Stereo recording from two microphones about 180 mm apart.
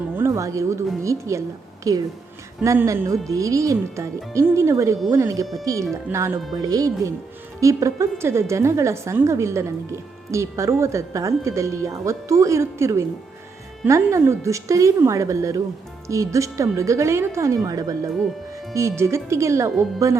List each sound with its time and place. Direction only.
0.2 s a woman's voice: 15° right (ahead or behind)